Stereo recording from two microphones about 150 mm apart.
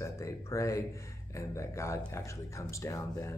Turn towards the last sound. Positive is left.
turn(degrees=20)  # may be behind; listen again after turning